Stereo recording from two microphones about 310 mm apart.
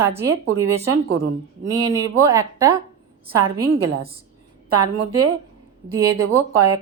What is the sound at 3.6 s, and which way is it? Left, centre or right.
Speech, right.